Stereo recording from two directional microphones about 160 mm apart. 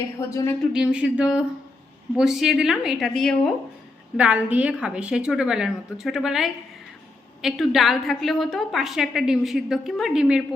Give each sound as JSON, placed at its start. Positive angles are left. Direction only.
{"t": 0.2, "sound": "a woman's voice", "side_deg": 20}
{"t": 0.7, "sound": "a woman's voice", "side_deg": -5}
{"t": 4.2, "sound": "a woman's voice", "side_deg": -5}